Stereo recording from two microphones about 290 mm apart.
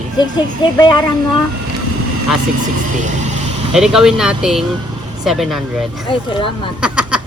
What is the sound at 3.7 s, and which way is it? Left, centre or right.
Speech, centre.